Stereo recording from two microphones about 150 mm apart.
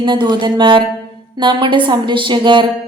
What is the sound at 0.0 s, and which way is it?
A woman's voice, 30° right (ahead or behind).